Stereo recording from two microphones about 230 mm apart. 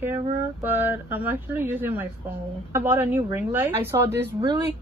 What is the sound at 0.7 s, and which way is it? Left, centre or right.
A woman's voice, centre.